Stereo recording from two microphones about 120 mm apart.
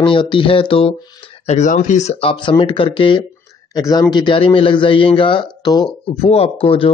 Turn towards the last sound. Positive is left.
turn(degrees=50)  # may be behind; listen again after turning